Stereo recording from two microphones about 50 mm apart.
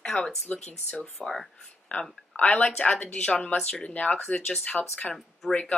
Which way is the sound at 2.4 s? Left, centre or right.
Left.